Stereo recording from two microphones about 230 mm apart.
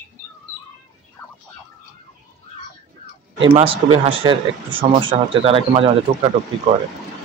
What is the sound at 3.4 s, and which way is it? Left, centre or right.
Speech, right.